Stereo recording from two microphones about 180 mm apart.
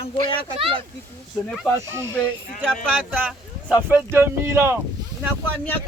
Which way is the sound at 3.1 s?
5° right (ahead or behind).